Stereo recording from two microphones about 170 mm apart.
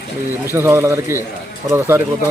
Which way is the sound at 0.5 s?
15° right (ahead or behind).